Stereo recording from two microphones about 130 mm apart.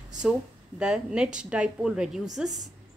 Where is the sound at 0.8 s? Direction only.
5° right (ahead or behind).